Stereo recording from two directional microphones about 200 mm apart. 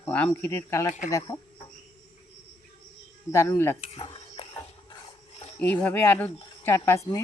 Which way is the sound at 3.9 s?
30° left (ahead or behind).